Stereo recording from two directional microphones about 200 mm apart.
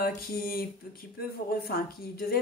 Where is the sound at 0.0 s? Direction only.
50° left (ahead or behind).